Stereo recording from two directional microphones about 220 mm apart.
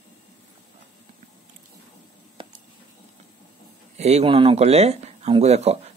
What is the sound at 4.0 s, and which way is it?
Speech, 30° right (ahead or behind).